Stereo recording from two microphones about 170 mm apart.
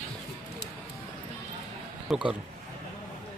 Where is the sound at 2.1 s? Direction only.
5° right (ahead or behind).